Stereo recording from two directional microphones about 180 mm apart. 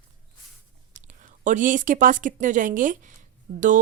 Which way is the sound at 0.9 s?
45° right (ahead or behind).